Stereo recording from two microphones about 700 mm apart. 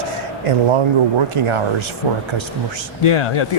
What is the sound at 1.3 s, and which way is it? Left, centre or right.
Speech, right.